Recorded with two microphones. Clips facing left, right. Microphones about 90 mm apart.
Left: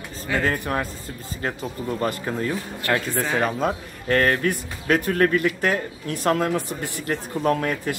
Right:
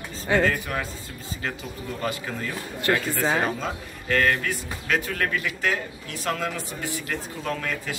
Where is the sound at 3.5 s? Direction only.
50° left (ahead or behind).